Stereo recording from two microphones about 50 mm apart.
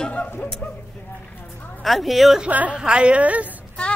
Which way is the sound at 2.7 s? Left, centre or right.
Centre.